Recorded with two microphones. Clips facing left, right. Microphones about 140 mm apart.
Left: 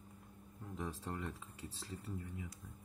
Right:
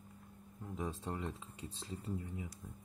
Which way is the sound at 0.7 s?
15° right (ahead or behind).